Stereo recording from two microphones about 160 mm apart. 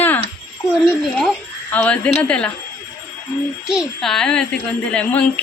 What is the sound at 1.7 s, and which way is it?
Speech, 10° left (ahead or behind).